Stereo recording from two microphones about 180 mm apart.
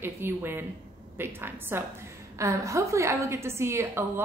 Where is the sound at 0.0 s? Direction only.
10° right (ahead or behind).